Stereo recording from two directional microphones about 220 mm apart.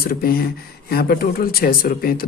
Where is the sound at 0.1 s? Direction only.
45° left (ahead or behind).